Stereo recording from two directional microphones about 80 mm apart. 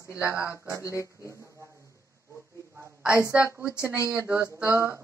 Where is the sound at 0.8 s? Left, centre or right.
Left.